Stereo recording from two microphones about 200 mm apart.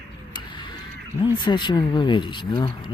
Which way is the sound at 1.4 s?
20° left (ahead or behind).